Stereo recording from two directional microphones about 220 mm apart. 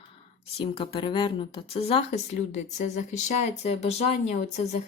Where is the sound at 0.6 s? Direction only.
25° left (ahead or behind).